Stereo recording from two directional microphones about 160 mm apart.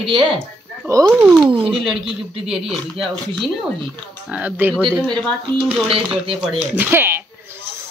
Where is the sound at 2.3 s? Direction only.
35° right (ahead or behind).